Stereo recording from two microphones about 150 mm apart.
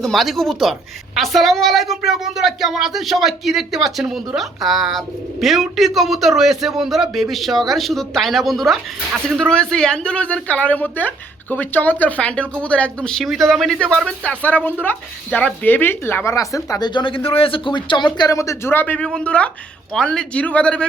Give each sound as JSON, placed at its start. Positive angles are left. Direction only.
{"t": 0.0, "sound": "speech", "side_deg": 0}